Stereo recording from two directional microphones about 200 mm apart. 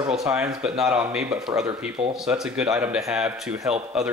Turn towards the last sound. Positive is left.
turn(degrees=-5)  # may be behind; listen again after turning